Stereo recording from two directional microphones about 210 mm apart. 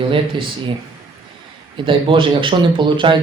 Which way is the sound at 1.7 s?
25° right (ahead or behind).